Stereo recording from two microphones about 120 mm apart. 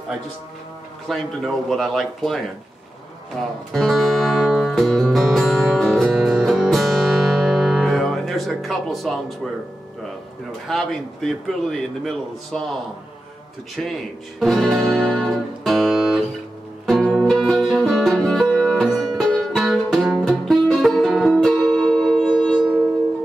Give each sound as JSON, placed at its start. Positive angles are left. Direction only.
{"t": 1.0, "sound": "a man's voice", "side_deg": 0}
{"t": 3.7, "sound": "music", "side_deg": 0}
{"t": 10.7, "sound": "a man's voice", "side_deg": 0}
{"t": 13.8, "sound": "a man's voice", "side_deg": 0}
{"t": 14.4, "sound": "music", "side_deg": 0}